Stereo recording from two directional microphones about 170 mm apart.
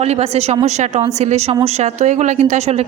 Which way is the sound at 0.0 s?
40° right (ahead or behind).